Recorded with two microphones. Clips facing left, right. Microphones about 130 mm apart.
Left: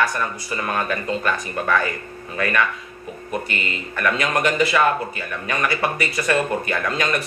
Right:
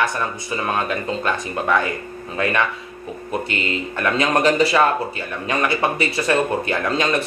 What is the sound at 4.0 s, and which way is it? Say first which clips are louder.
Speech: right 2 dB; 30° right (ahead or behind).